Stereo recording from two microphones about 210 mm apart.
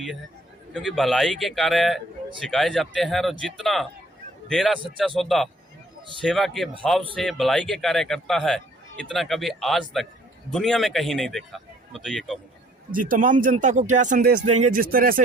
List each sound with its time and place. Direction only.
0.7 s a man's voice: centre (ahead or behind)
12.9 s speech: 40° right (ahead or behind)